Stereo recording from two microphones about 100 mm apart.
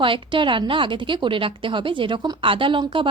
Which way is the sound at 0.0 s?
60° right (ahead or behind).